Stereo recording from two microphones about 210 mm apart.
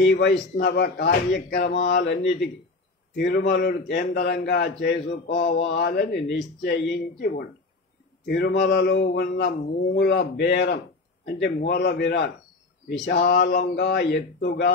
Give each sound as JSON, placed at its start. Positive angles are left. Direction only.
{"t": 0.0, "sound": "a man's voice", "side_deg": 55}
{"t": 8.3, "sound": "a man's voice", "side_deg": 55}